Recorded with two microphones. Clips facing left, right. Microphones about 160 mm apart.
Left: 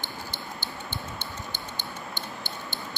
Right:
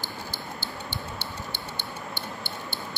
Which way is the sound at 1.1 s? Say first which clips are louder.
Right 1 dB; 65° right (ahead or behind).